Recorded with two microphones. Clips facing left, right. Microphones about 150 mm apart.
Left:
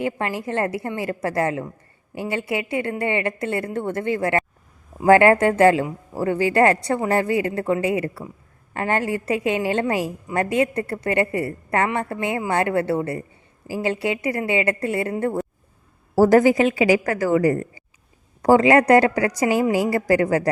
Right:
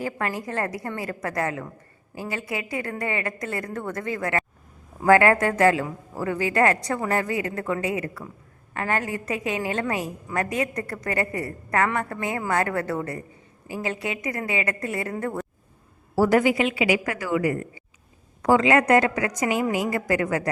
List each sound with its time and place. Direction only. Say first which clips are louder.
0.0 s a woman's voice: left 4 dB; 25° left (ahead or behind)
16.1 s a woman's voice: left 5 dB; 40° left (ahead or behind)